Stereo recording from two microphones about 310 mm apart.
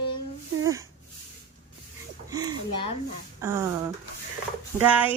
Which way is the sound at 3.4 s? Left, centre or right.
Centre.